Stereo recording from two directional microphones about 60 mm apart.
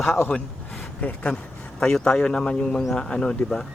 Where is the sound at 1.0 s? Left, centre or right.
Left.